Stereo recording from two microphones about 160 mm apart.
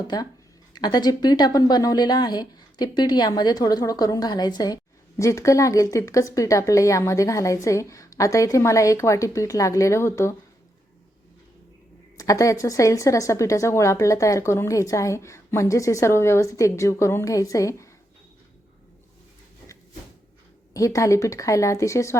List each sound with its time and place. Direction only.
0.1 s a woman's voice: 25° left (ahead or behind)
12.1 s a woman's voice: 20° left (ahead or behind)
20.7 s a woman's voice: 20° left (ahead or behind)